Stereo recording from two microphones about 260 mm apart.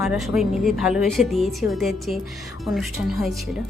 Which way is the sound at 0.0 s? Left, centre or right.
Centre.